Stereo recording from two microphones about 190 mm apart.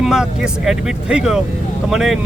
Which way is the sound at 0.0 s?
5° right (ahead or behind).